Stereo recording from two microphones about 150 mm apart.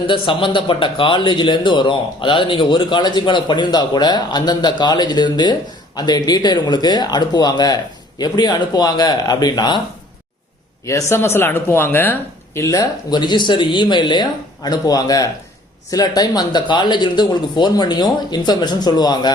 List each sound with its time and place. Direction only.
0.1 s speech: 35° left (ahead or behind)
10.8 s speech: 15° left (ahead or behind)